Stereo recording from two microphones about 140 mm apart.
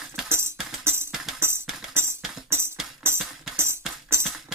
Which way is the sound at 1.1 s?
5° right (ahead or behind).